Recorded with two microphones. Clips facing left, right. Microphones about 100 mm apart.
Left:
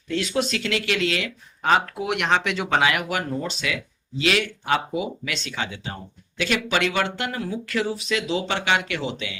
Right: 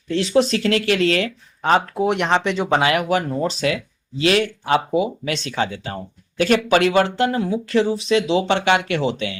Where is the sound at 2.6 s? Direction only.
40° right (ahead or behind).